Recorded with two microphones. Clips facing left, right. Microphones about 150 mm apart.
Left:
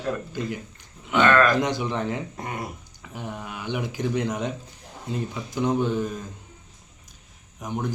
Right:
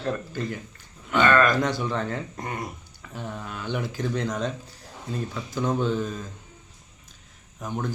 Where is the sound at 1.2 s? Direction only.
5° right (ahead or behind).